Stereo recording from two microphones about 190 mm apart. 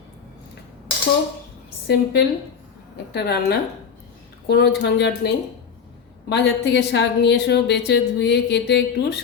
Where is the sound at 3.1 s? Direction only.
60° left (ahead or behind).